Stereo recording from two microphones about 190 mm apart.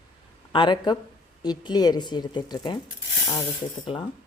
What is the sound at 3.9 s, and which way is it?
Speech, 30° left (ahead or behind).